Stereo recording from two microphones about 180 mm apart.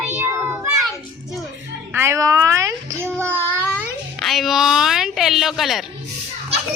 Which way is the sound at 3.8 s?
Centre (ahead or behind).